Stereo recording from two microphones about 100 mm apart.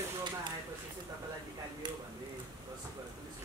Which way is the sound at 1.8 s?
50° right (ahead or behind).